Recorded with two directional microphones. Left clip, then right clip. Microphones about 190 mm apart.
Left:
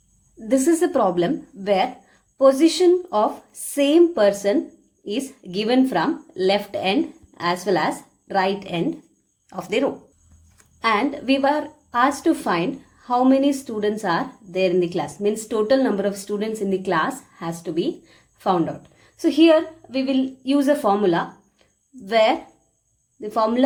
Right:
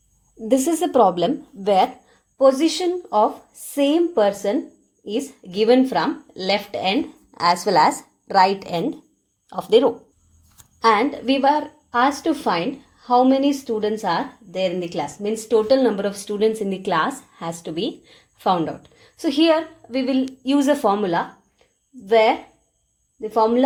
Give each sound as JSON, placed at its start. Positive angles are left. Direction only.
{"t": 0.4, "sound": "a woman's voice", "side_deg": -30}
{"t": 9.5, "sound": "speech", "side_deg": -10}
{"t": 10.8, "sound": "a woman's voice", "side_deg": -35}